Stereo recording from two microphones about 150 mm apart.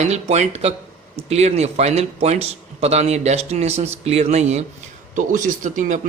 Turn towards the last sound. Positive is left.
turn(degrees=-60)  # may be behind; listen again after turning